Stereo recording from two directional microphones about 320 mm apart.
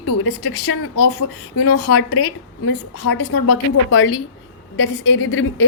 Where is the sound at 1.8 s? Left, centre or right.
Left.